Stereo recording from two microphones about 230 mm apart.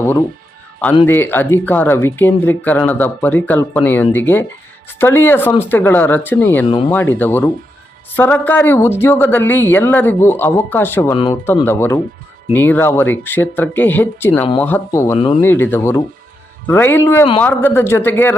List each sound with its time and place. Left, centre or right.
1.0 s speech: centre
6.7 s speech: left
6.9 s speech: centre